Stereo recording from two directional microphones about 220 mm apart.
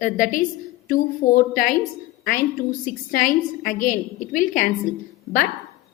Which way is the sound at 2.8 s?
40° left (ahead or behind).